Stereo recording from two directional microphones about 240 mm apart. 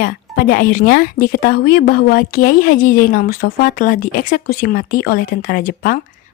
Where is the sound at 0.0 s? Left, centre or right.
Left.